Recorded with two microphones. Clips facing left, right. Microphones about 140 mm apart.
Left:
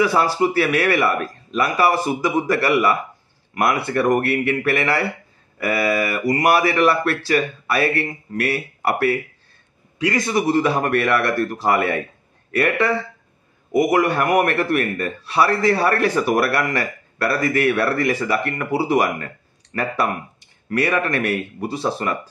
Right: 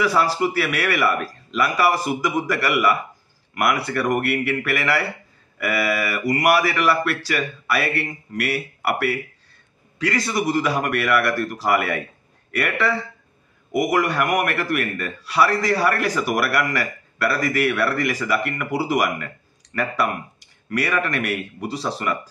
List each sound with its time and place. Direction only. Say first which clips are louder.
0.1 s a man's voice: left 2 dB; 25° left (ahead or behind)